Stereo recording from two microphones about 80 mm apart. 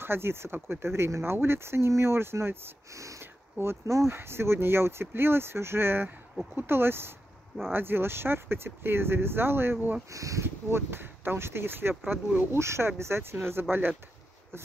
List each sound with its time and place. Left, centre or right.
0.0 s speech: right
3.0 s sniff: right
3.5 s speech: right
10.1 s speech: right
10.4 s speech: right